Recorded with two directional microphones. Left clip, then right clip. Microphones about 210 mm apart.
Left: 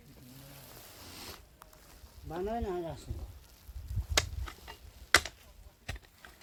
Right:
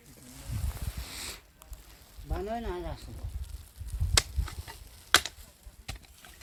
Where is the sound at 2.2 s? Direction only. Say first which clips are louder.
Even; 30° right (ahead or behind).